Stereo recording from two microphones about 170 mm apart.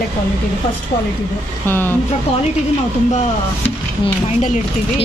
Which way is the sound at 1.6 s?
10° left (ahead or behind).